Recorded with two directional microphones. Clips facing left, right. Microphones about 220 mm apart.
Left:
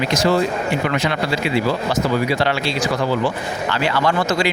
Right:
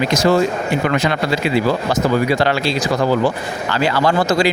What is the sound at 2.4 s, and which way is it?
Speech, 40° right (ahead or behind).